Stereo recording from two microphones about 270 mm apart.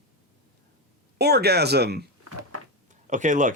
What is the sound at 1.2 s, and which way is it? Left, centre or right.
Speech, right.